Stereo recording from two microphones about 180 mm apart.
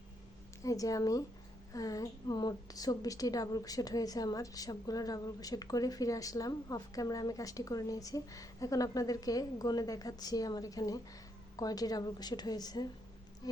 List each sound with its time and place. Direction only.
0.6 s a woman's voice: 20° left (ahead or behind)